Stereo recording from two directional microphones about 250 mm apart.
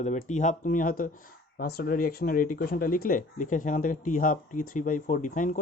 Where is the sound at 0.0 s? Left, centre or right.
Left.